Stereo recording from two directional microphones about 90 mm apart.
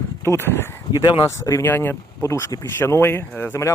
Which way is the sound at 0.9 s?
55° left (ahead or behind).